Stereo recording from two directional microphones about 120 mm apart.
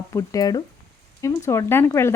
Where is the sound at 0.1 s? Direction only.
30° left (ahead or behind).